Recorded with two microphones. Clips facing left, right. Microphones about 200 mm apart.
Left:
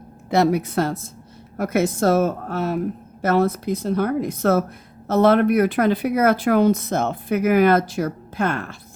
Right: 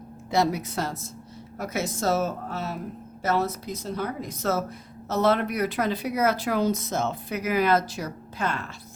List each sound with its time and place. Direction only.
0.3 s speech: 60° left (ahead or behind)